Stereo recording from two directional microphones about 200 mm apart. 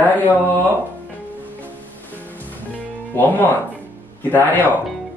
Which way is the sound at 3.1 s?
10° left (ahead or behind).